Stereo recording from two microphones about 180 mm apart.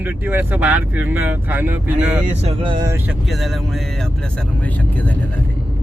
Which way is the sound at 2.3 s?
30° right (ahead or behind).